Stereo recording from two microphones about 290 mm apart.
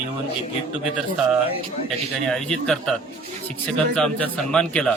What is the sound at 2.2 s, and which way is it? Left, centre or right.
Speech, centre.